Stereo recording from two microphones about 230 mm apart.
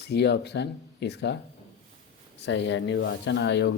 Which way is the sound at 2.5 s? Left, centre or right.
Left.